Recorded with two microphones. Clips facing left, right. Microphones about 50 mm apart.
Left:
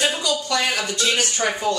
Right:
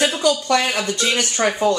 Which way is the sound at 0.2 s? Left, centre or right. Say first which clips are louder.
Right 5 dB; right.